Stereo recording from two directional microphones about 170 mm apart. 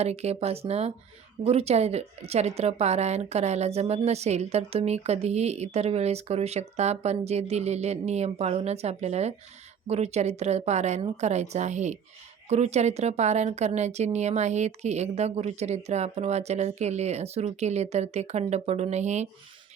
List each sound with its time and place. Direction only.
0.0 s a woman's voice: 40° right (ahead or behind)